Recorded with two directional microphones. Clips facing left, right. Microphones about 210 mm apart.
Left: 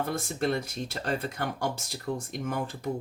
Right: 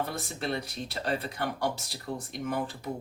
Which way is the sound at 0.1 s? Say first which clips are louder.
Left 5 dB; 45° left (ahead or behind).